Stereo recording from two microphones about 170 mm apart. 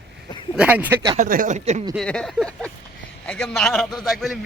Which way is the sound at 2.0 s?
5° left (ahead or behind).